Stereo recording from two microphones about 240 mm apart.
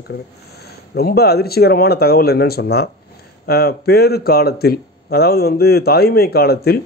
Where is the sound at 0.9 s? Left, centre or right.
Left.